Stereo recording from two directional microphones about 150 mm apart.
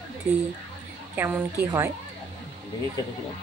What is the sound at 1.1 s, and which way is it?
Speech, 15° right (ahead or behind).